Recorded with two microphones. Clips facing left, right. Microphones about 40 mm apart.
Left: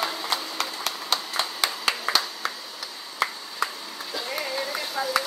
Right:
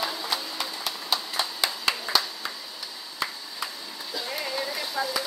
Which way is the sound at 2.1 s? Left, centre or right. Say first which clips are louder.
Left 1 dB; centre.